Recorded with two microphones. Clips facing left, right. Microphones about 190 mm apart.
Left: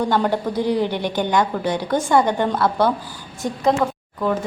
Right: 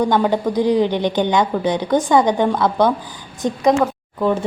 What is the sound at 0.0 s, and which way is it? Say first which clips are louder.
Speech: right 3 dB; 15° right (ahead or behind).